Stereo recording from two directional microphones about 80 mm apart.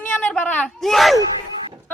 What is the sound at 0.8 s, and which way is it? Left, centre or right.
Speech, centre.